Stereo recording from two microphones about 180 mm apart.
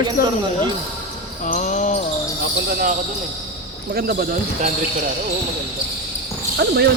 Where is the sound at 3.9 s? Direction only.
55° right (ahead or behind).